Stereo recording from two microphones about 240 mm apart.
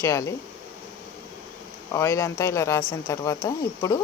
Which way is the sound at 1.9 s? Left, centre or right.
Centre.